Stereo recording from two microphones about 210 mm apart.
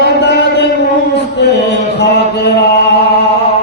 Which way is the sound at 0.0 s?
55° left (ahead or behind).